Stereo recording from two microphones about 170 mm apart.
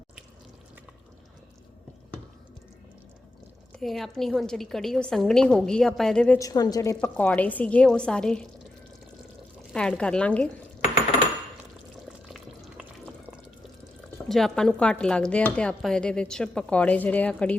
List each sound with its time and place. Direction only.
3.8 s speech: centre (ahead or behind)
6.4 s a woman's voice: 20° left (ahead or behind)
7.0 s a woman's voice: 10° left (ahead or behind)
9.7 s speech: 5° left (ahead or behind)
10.8 s coin: 35° left (ahead or behind)
12.3 s a sound: centre (ahead or behind)
14.3 s speech: centre (ahead or behind)